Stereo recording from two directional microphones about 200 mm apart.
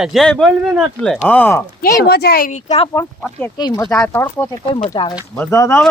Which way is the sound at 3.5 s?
20° left (ahead or behind).